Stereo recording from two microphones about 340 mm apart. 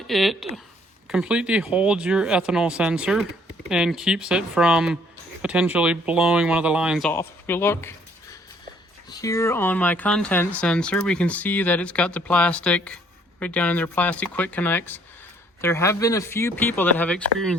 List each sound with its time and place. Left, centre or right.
0.1 s speech: centre